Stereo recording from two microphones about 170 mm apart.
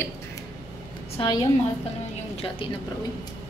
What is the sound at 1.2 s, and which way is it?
Speech, 30° left (ahead or behind).